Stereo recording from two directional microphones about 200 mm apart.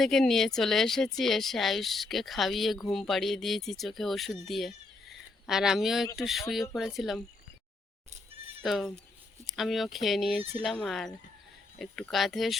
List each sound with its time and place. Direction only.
0.0 s speech: centre (ahead or behind)
8.1 s goat: 30° right (ahead or behind)
8.6 s speech: centre (ahead or behind)